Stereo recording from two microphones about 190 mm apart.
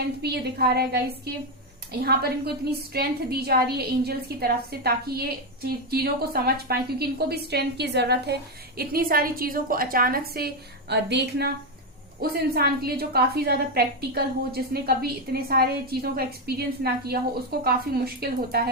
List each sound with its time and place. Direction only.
0.2 s a woman's voice: 55° right (ahead or behind)